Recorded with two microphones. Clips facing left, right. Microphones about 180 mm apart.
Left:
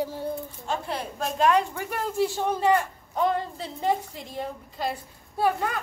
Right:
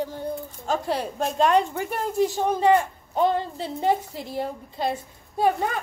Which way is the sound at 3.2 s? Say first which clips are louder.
Right 3 dB; 30° right (ahead or behind).